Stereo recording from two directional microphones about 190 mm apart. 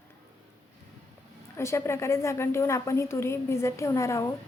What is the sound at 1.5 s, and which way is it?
A woman's voice, 15° left (ahead or behind).